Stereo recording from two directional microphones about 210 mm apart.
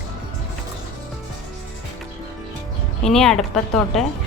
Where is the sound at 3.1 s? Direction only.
5° left (ahead or behind).